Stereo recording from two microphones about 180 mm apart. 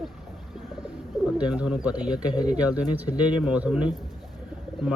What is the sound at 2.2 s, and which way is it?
Speech, 25° left (ahead or behind).